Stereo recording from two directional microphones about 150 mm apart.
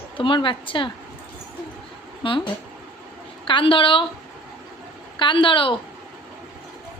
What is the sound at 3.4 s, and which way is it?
Speech, 35° left (ahead or behind).